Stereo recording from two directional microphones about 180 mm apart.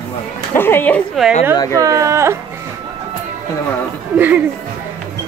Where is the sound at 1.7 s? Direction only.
20° right (ahead or behind).